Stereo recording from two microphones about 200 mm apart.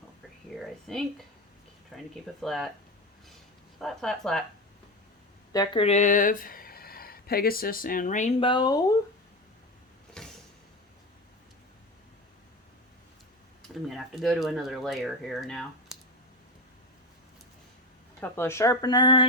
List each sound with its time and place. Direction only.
1.9 s speech: centre (ahead or behind)
3.8 s speech: centre (ahead or behind)
5.5 s speech: 20° left (ahead or behind); by 8.3 s 40° left (ahead or behind)
8.4 s speech: 25° left (ahead or behind)
10.2 s a sound: 5° left (ahead or behind)
13.8 s speech: centre (ahead or behind)
18.2 s speech: 10° left (ahead or behind)